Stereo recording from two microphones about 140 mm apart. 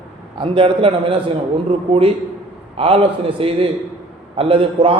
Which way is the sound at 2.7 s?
45° right (ahead or behind).